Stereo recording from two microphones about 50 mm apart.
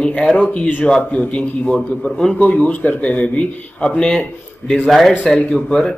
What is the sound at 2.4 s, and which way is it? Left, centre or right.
A man's voice, left.